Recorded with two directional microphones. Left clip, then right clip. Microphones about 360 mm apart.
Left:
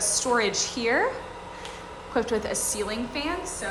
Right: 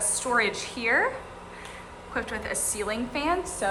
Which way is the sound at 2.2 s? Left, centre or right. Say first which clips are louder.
Left 5 dB; centre.